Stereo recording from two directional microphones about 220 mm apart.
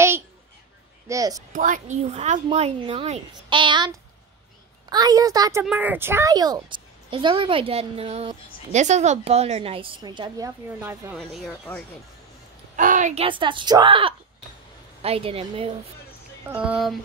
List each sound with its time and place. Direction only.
1.0 s speech: 15° right (ahead or behind)
1.5 s a woman's voice: 35° right (ahead or behind); by 11.1 s 10° right (ahead or behind)
11.1 s speech: centre (ahead or behind)
12.7 s a woman's voice: 35° right (ahead or behind)
16.4 s speech: 5° right (ahead or behind)